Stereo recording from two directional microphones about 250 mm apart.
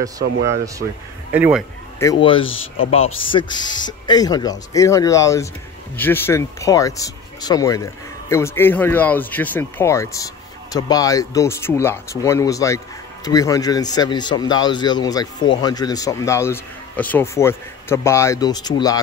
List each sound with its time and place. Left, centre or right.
1.3 s a man's voice: centre
2.0 s speech: centre
2.4 s speech: left
3.3 s speech: centre